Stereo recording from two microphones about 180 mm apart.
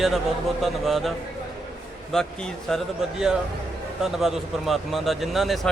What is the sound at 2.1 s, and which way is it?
Speech, centre (ahead or behind).